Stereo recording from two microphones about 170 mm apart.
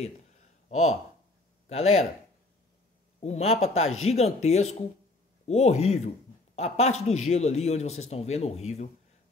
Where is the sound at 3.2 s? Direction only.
40° left (ahead or behind).